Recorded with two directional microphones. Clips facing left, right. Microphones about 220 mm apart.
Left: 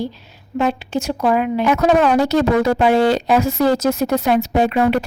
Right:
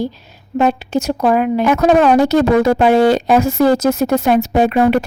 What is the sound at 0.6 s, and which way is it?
A woman's voice, 40° right (ahead or behind).